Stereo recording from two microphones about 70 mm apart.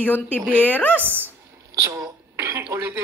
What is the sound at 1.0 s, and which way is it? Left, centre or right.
Speech, right.